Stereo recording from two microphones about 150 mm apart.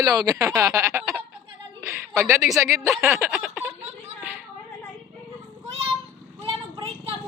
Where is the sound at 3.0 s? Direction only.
15° right (ahead or behind).